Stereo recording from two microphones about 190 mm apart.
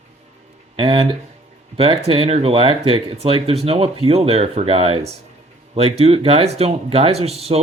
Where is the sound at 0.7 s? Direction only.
25° right (ahead or behind).